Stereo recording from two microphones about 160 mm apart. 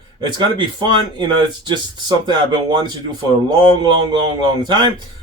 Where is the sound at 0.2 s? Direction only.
25° right (ahead or behind).